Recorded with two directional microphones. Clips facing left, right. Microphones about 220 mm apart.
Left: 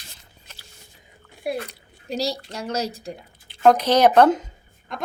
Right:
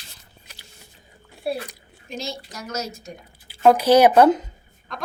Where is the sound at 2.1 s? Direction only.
35° left (ahead or behind).